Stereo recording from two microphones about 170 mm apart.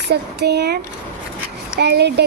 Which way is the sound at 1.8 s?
75° right (ahead or behind).